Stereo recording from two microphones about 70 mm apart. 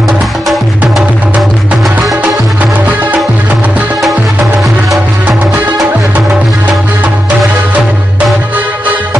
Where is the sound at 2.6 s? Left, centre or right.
Right.